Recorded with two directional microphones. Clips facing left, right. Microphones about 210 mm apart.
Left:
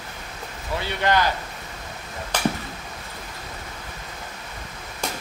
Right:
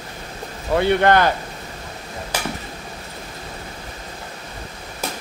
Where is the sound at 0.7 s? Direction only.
55° right (ahead or behind).